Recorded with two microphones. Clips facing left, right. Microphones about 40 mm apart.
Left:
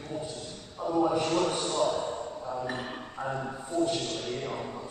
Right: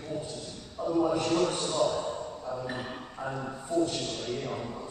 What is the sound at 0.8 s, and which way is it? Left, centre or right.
A man's voice, centre.